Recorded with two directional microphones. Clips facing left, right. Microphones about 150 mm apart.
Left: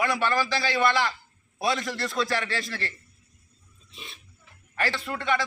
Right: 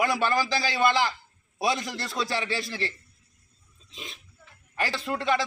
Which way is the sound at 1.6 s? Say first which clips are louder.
Left 1 dB; 15° right (ahead or behind).